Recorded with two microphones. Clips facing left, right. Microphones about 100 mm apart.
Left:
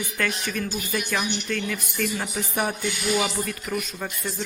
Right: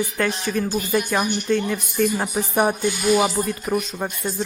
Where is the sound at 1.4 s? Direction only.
30° right (ahead or behind).